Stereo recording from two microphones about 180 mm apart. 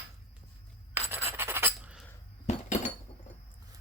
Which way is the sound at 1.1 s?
15° right (ahead or behind).